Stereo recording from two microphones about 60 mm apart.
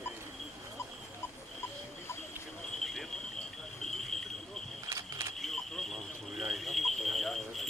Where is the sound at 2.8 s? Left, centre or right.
Centre.